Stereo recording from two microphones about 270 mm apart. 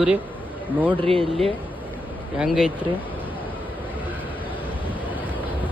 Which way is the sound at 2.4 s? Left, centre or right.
Centre.